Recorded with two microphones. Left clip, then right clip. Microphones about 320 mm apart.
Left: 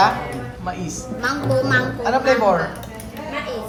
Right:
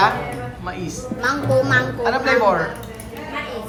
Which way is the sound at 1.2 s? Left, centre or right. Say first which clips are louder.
Right 2 dB; centre.